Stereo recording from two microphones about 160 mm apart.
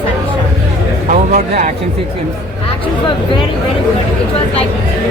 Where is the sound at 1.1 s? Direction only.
45° right (ahead or behind).